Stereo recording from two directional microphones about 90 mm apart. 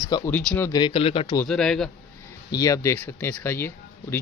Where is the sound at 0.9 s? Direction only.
90° left.